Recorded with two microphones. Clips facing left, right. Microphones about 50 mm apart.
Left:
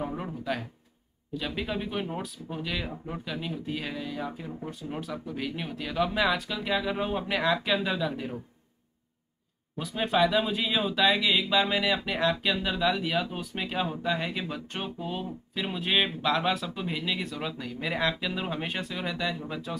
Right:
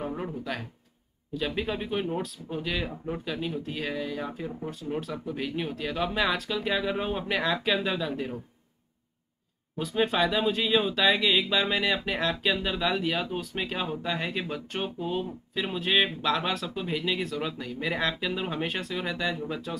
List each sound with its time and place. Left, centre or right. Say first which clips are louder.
0.2 s speech: left 1 dB; centre
5.3 s speech: right 5 dB; centre
9.8 s speech: even; centre
14.8 s speech: right 4 dB; centre
15.5 s speech: right 2 dB; centre